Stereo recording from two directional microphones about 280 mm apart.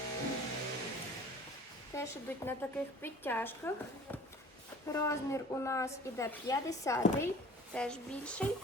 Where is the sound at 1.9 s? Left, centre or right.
Centre.